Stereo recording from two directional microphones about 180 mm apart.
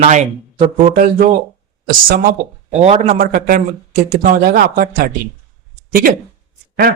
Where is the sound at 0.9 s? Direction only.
50° right (ahead or behind).